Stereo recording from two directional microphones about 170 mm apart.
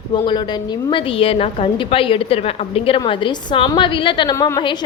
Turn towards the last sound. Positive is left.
turn(degrees=15)  # may be behind; listen again after turning